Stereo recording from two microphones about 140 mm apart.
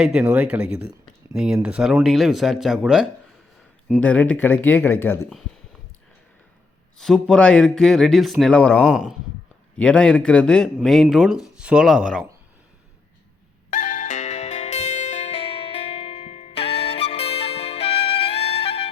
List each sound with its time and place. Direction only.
0.0 s speech: 5° right (ahead or behind)
4.0 s speech: 10° left (ahead or behind)
7.0 s speech: 5° left (ahead or behind)
8.8 s speech: 5° right (ahead or behind)
9.7 s speech: 10° left (ahead or behind)
13.7 s music: 65° left (ahead or behind); by 18.9 s 45° left (ahead or behind)